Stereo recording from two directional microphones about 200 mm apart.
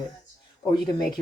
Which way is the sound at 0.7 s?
20° left (ahead or behind).